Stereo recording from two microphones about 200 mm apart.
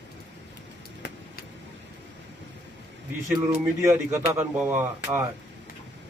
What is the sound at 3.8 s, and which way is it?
Speech, 15° right (ahead or behind).